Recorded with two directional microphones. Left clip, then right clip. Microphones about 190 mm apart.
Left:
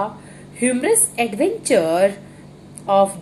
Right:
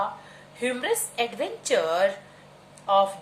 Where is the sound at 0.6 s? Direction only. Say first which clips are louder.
Left 8 dB; 15° left (ahead or behind).